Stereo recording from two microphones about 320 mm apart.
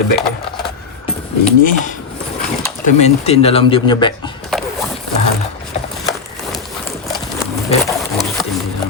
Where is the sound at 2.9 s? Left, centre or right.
Left.